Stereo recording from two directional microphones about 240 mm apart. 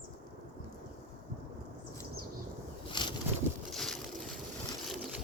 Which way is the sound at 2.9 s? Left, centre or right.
Centre.